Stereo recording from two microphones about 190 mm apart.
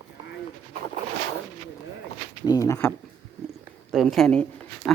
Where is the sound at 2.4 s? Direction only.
15° left (ahead or behind).